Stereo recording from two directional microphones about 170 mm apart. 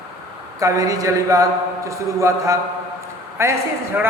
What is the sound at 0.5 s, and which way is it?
A man's voice, 20° right (ahead or behind).